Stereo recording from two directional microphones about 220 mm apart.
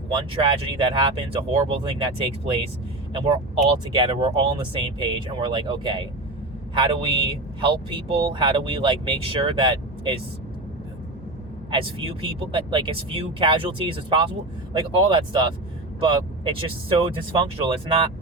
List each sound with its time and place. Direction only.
0.1 s a man's voice: 20° right (ahead or behind)
11.7 s a man's voice: 25° right (ahead or behind)